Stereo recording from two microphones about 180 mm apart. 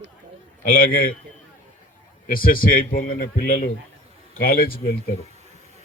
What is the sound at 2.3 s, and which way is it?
Speech, 50° left (ahead or behind).